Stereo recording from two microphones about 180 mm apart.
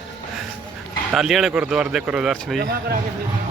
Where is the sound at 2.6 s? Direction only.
60° right (ahead or behind).